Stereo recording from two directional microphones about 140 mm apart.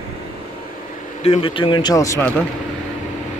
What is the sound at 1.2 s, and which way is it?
A man's voice, 45° left (ahead or behind).